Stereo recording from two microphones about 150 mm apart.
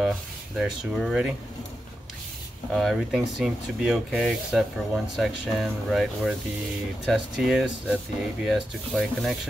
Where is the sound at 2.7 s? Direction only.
Centre (ahead or behind).